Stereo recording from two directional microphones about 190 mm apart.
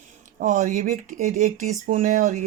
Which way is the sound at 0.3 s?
40° right (ahead or behind).